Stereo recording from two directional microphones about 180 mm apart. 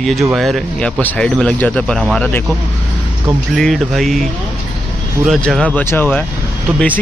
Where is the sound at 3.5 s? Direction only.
Centre (ahead or behind).